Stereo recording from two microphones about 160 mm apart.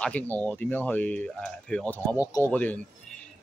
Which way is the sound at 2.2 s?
20° left (ahead or behind).